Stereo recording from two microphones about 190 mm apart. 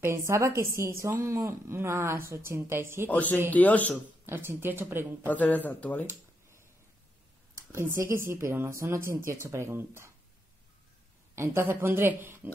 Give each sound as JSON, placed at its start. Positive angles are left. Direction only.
{"t": 0.6, "sound": "speech", "side_deg": -15}
{"t": 3.1, "sound": "speech", "side_deg": 10}
{"t": 4.3, "sound": "speech", "side_deg": -10}
{"t": 5.3, "sound": "speech", "side_deg": 10}
{"t": 7.5, "sound": "speech", "side_deg": -15}
{"t": 11.3, "sound": "speech", "side_deg": -15}